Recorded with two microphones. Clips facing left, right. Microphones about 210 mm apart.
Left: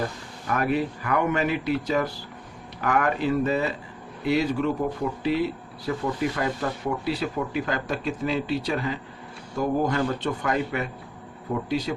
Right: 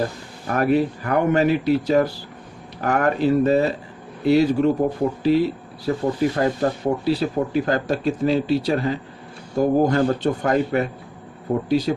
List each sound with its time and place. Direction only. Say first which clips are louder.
0.4 s speech: right 6 dB; 35° right (ahead or behind)